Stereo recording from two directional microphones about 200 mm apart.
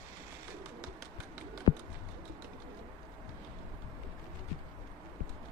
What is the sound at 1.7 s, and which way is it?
Bird, 30° left (ahead or behind).